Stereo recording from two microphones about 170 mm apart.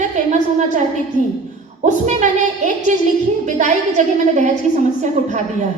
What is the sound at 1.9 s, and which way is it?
A woman's voice, 45° right (ahead or behind).